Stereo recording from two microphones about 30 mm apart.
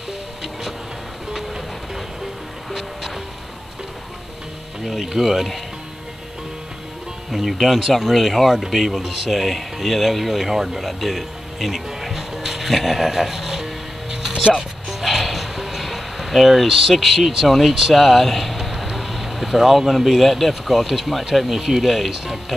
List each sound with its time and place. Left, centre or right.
4.8 s speech: centre
7.2 s speech: centre
9.0 s speech: centre
9.3 s speech: centre
10.4 s speech: centre
10.9 s music: centre
14.9 s a sound: centre
16.6 s speech: centre
17.9 s vehicle: centre
20.1 s speech: centre